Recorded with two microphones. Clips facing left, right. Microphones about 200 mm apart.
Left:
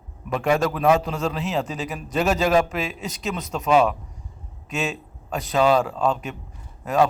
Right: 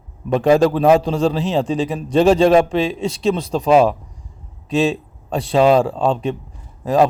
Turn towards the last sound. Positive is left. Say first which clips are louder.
# right 5 dB
turn(degrees=-30)  # may be behind; listen again after turning